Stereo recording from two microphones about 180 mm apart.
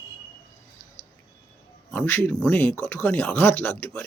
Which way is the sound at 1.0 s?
40° left (ahead or behind).